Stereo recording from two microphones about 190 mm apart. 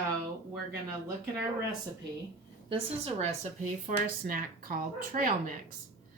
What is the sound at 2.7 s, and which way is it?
Speech, 30° right (ahead or behind).